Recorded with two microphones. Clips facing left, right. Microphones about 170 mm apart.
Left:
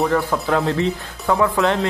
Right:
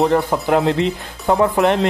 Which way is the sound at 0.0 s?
20° right (ahead or behind).